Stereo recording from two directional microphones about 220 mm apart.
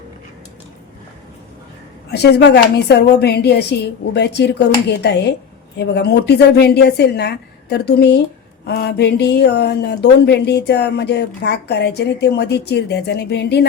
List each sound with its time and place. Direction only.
2.0 s speech: 50° left (ahead or behind)